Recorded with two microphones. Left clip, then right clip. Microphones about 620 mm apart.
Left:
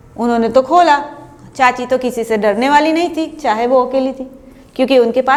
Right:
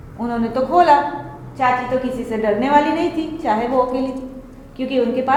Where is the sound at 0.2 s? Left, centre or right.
Left.